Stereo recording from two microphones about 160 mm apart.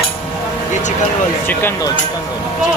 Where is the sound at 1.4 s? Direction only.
15° left (ahead or behind).